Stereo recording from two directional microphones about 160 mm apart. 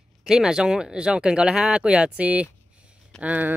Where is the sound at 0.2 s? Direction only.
5° right (ahead or behind).